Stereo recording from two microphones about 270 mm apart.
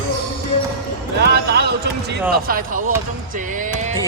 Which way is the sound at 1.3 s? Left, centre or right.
Right.